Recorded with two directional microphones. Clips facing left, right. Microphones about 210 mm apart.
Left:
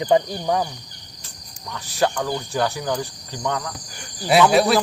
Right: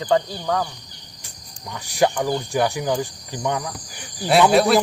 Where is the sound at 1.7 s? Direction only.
15° right (ahead or behind).